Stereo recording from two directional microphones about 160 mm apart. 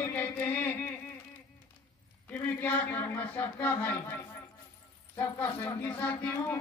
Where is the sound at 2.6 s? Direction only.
10° left (ahead or behind).